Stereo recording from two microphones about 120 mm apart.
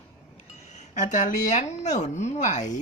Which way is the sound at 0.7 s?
80° left.